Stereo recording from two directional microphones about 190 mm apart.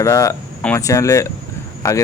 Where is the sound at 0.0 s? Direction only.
15° left (ahead or behind).